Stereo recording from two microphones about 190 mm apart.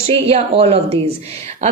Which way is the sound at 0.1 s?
30° right (ahead or behind).